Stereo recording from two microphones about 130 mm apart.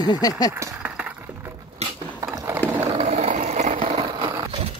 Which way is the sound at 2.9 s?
60° right (ahead or behind).